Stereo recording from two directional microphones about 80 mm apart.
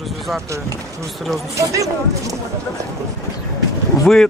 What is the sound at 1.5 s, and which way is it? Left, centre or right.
Speech, right.